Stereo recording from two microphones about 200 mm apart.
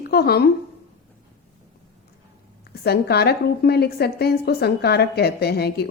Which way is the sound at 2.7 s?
50° left (ahead or behind).